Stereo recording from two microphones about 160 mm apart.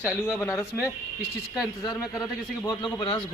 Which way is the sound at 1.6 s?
25° left (ahead or behind).